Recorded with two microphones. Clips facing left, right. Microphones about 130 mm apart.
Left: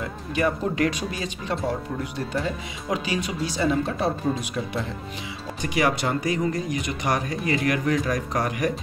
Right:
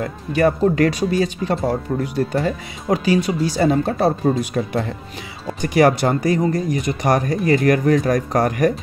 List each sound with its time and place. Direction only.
0.3 s speech: 45° right (ahead or behind)
5.6 s speech: 45° right (ahead or behind)